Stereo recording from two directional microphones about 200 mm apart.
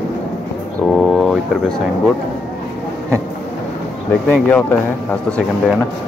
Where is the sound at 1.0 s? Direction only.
Centre (ahead or behind).